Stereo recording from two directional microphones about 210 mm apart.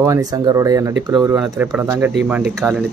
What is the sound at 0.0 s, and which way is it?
Speech, 15° right (ahead or behind).